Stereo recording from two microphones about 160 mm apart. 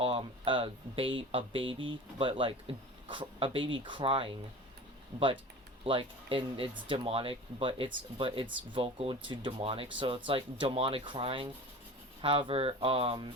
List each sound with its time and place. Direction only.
0.0 s speech: 35° right (ahead or behind)
5.8 s speech: 35° right (ahead or behind)